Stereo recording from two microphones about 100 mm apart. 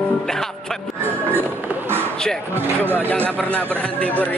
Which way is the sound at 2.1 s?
5° left (ahead or behind).